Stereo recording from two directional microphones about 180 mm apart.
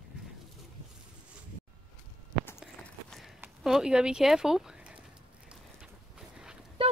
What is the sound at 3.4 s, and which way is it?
Speech, centre (ahead or behind).